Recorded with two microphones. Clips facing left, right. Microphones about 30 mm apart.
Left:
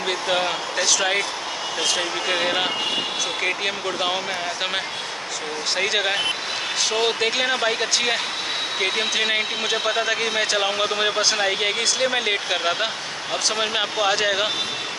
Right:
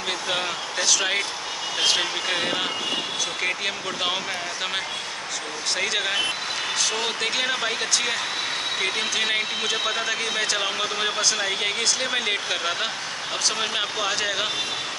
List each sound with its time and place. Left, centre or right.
0.3 s speech: centre
2.2 s speech: centre
5.8 s speech: centre
11.6 s speech: centre